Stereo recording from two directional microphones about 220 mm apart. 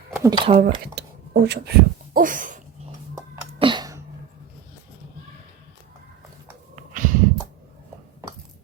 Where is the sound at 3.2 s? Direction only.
20° right (ahead or behind).